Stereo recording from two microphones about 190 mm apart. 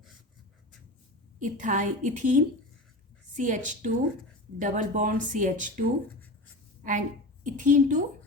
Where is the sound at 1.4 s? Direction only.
45° right (ahead or behind).